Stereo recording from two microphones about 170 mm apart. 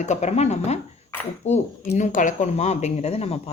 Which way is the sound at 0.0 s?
45° left (ahead or behind).